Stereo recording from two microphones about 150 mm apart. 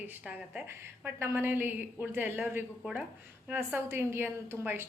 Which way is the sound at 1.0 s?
15° right (ahead or behind).